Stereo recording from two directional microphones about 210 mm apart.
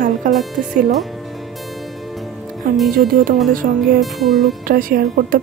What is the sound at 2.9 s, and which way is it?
Speech, 40° right (ahead or behind).